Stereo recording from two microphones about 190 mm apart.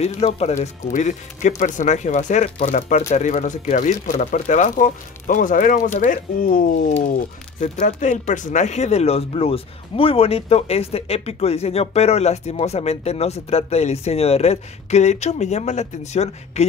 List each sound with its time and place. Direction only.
0.0 s speech: 35° left (ahead or behind)